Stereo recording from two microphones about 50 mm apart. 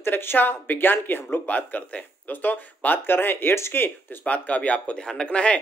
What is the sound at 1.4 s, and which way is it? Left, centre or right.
Speech, left.